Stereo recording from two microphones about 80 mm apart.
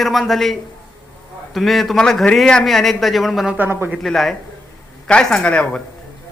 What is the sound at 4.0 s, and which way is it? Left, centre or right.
Speech, centre.